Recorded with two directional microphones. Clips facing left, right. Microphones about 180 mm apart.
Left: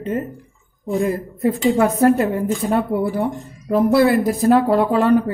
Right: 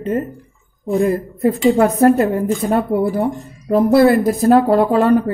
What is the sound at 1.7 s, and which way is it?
A woman's voice, 40° right (ahead or behind).